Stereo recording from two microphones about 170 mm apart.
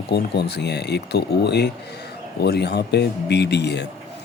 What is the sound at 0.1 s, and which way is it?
Speech, 75° left (ahead or behind).